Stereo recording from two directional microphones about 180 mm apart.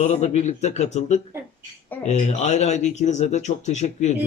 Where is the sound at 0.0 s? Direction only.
40° left (ahead or behind).